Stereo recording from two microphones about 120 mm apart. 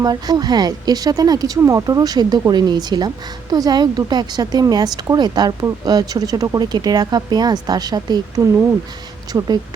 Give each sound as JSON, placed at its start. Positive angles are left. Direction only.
{"t": 0.0, "sound": "speech", "side_deg": -35}